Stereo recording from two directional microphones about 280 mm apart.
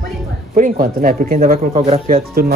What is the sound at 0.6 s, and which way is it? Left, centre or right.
Speech, right.